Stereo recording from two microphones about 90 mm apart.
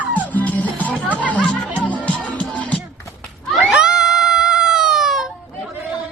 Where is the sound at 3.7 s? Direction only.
10° right (ahead or behind).